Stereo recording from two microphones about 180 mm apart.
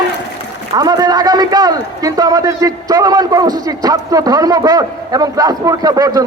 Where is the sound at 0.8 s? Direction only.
20° right (ahead or behind).